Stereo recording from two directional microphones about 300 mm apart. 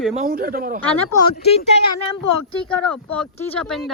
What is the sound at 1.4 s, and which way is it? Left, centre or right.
Speech, left.